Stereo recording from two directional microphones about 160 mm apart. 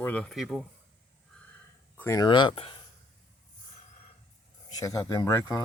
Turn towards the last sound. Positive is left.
turn(degrees=25)  # may be behind; listen again after turning